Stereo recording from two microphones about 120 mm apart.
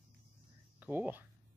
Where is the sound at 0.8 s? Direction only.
15° right (ahead or behind).